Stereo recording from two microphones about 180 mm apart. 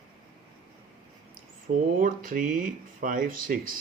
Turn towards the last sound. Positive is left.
turn(degrees=-50)  # may be behind; listen again after turning